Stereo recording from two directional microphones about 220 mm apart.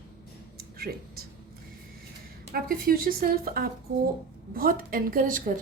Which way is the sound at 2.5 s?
40° right (ahead or behind).